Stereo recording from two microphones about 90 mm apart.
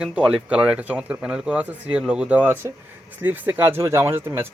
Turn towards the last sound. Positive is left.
turn(degrees=-25)  # may be behind; listen again after turning